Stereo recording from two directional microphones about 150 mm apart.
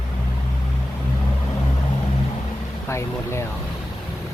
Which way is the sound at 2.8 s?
20° left (ahead or behind).